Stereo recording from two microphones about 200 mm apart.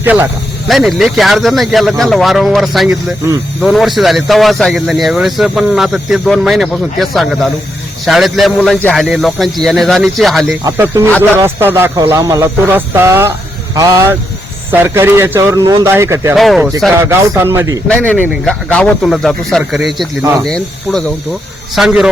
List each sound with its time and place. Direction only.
0.0 s a man's voice: 10° right (ahead or behind)
10.6 s speech: 15° right (ahead or behind)
16.3 s a man's voice: centre (ahead or behind)
17.0 s speech: 10° right (ahead or behind)
17.8 s a man's voice: 5° left (ahead or behind)